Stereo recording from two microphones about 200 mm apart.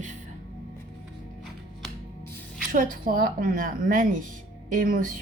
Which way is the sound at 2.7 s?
45° right (ahead or behind).